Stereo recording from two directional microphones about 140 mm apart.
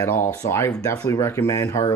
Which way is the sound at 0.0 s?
20° left (ahead or behind).